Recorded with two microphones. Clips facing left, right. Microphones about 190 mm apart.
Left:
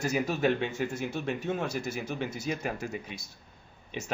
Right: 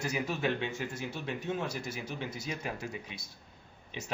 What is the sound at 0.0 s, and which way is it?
Speech, 45° left (ahead or behind).